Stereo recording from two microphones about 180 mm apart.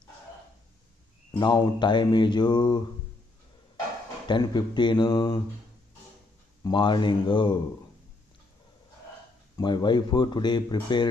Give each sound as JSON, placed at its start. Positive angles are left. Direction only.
{"t": 1.4, "sound": "speech", "side_deg": 25}
{"t": 4.3, "sound": "speech", "side_deg": 25}
{"t": 6.6, "sound": "speech", "side_deg": 25}
{"t": 9.6, "sound": "speech", "side_deg": 25}